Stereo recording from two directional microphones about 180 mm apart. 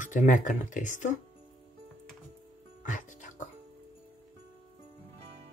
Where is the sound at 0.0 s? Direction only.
45° left (ahead or behind).